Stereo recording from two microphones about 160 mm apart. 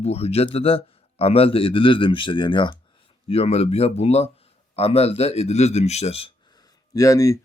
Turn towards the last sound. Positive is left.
turn(degrees=20)  # may be behind; listen again after turning